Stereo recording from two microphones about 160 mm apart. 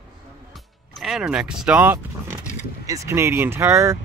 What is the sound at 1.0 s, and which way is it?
Speech, 5° right (ahead or behind).